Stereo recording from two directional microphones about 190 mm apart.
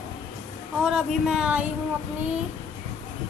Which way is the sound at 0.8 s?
5° right (ahead or behind).